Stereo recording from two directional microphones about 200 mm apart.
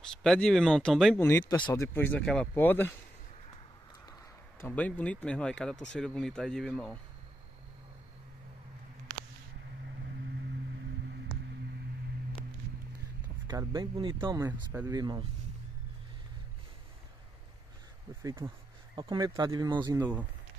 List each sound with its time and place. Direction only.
0.0 s speech: 5° left (ahead or behind)
1.5 s speech: 15° left (ahead or behind)
4.6 s speech: 10° left (ahead or behind)
13.5 s speech: 20° right (ahead or behind)
18.2 s speech: 15° right (ahead or behind)
20.0 s speech: 10° right (ahead or behind)